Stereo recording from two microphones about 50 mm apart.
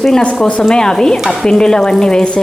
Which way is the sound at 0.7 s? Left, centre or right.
Centre.